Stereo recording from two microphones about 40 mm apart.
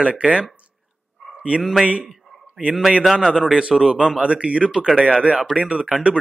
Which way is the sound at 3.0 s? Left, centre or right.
Centre.